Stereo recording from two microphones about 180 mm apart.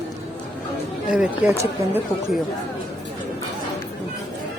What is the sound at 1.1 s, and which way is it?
Speech, 5° right (ahead or behind).